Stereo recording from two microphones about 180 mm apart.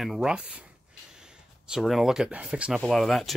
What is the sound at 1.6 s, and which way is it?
Speech, centre (ahead or behind).